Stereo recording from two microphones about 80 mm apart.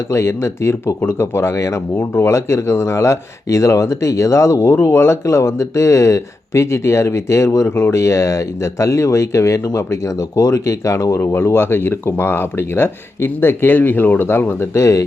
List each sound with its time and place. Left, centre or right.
0.1 s speech: left